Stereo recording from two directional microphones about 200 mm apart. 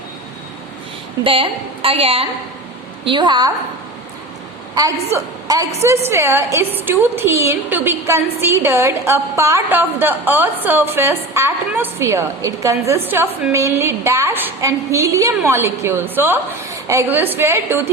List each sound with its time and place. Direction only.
1.2 s a woman's voice: 25° right (ahead or behind)
4.7 s a woman's voice: 15° right (ahead or behind)